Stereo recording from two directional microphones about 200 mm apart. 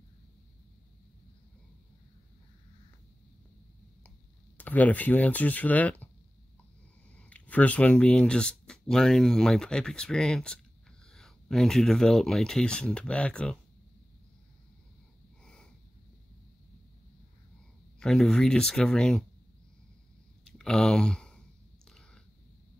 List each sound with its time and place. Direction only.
4.6 s speech: 10° left (ahead or behind)
7.2 s speech: 5° left (ahead or behind)
15.4 s snort: 5° left (ahead or behind)
17.9 s speech: 5° left (ahead or behind)
20.4 s a sound: 5° left (ahead or behind)